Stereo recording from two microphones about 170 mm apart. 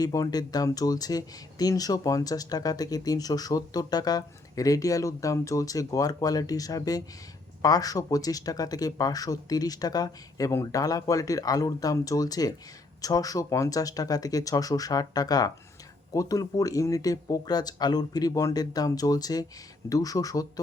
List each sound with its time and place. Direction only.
0.0 s speech: 20° left (ahead or behind)